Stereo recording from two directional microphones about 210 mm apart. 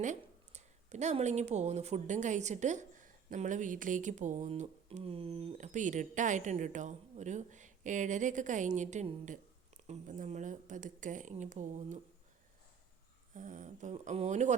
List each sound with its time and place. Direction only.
0.0 s speech: 35° right (ahead or behind)
13.3 s speech: 35° right (ahead or behind)